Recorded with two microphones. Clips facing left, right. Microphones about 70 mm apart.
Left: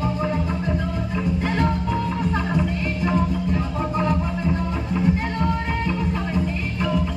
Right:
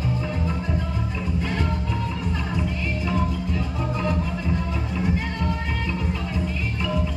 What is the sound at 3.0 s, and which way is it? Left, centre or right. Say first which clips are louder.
Music: left 5 dB; left.